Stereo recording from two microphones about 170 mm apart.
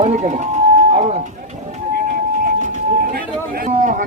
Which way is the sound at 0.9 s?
40° right (ahead or behind).